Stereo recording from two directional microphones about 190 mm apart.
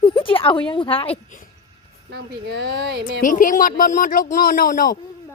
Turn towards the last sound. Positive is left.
turn(degrees=50)  # may be behind; listen again after turning